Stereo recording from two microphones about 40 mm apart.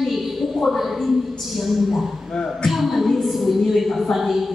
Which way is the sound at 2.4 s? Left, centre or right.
Centre.